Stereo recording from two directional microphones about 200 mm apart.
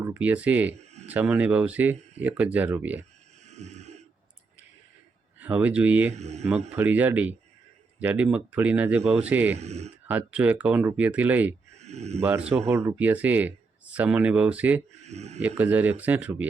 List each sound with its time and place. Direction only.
0.0 s speech: 10° right (ahead or behind)
3.4 s a sound: 35° right (ahead or behind)
5.4 s speech: 10° right (ahead or behind)
6.1 s speech: 35° right (ahead or behind)
6.7 s speech: 10° right (ahead or behind)
9.6 s speech: 35° right (ahead or behind)
10.1 s speech: 10° right (ahead or behind)
11.8 s speech: 35° right (ahead or behind)
12.2 s speech: 5° right (ahead or behind)
15.0 s speech: 35° right (ahead or behind)
15.4 s speech: 10° right (ahead or behind)